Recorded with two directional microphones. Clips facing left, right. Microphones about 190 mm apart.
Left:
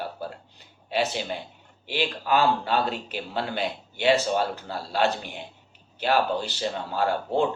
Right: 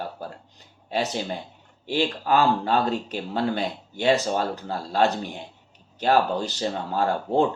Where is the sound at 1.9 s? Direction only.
45° right (ahead or behind).